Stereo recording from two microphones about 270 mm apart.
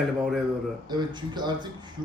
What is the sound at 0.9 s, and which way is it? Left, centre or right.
Speech, centre.